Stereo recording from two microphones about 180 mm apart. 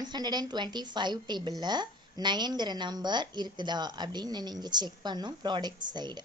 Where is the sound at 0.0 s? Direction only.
25° right (ahead or behind).